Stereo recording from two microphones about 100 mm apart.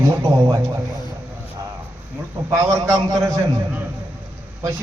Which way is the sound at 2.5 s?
30° right (ahead or behind).